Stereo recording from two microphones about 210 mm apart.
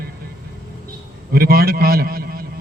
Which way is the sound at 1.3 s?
45° right (ahead or behind).